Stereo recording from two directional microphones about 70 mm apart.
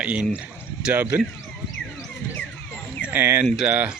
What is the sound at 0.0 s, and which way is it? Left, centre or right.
Speech, centre.